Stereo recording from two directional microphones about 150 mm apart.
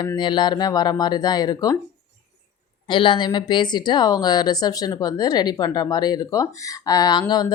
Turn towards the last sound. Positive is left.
turn(degrees=25)  # may be behind; listen again after turning